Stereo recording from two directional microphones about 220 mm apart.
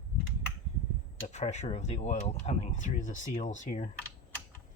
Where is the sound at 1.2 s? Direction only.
30° left (ahead or behind).